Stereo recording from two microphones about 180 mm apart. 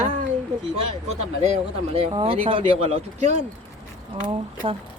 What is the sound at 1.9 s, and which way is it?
Speech, 35° right (ahead or behind).